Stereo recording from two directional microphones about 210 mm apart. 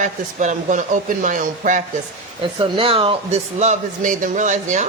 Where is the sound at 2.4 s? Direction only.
25° right (ahead or behind).